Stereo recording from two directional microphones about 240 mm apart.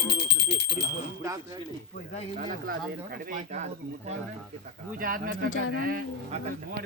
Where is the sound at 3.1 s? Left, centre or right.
Right.